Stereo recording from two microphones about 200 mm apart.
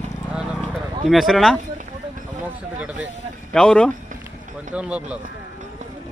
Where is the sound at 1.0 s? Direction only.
Centre (ahead or behind).